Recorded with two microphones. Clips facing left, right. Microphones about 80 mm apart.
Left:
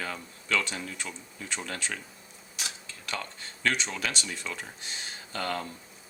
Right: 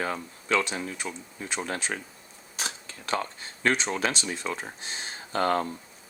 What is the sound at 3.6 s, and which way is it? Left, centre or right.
Speech, right.